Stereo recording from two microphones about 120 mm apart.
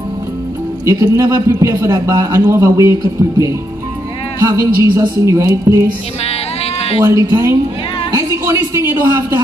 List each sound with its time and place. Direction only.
0.8 s a man's voice: 25° right (ahead or behind)
6.2 s sheep: 55° left (ahead or behind)
7.1 s a man's voice: 25° right (ahead or behind)